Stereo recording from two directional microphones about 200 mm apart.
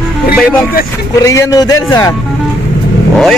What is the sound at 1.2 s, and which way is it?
Speech, 15° left (ahead or behind).